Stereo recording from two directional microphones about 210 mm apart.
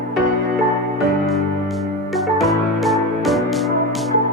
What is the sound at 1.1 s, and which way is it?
Music, centre (ahead or behind).